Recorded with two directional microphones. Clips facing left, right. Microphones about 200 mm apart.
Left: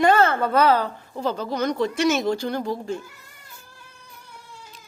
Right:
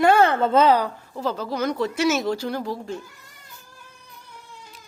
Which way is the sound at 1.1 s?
5° right (ahead or behind).